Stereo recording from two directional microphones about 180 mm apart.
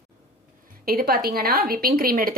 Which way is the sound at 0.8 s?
55° right (ahead or behind).